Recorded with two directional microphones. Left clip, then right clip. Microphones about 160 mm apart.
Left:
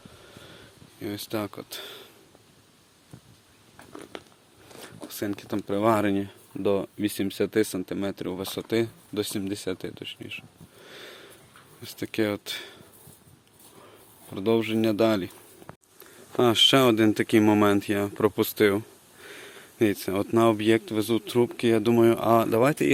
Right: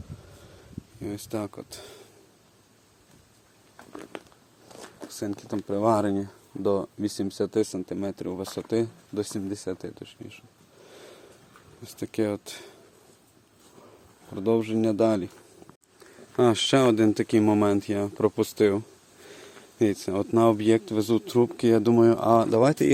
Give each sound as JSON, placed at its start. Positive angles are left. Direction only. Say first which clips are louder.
{"t": 0.9, "sound": "speech", "louder": "left 1 dB", "side_deg": -10}
{"t": 4.1, "sound": "a sound", "louder": "right 1 dB", "side_deg": -25}
{"t": 4.8, "sound": "speech", "louder": "left 1 dB", "side_deg": 0}
{"t": 6.0, "sound": "speech", "louder": "left 1 dB", "side_deg": 25}
{"t": 6.6, "sound": "speech", "louder": "even", "side_deg": -10}
{"t": 10.8, "sound": "sniff", "louder": "left 4 dB", "side_deg": 0}
{"t": 11.8, "sound": "speech", "louder": "left 1 dB", "side_deg": -10}
{"t": 14.3, "sound": "speech", "louder": "even", "side_deg": -10}
{"t": 16.4, "sound": "speech", "louder": "left 2 dB", "side_deg": -10}
{"t": 21.9, "sound": "speech", "louder": "even", "side_deg": -15}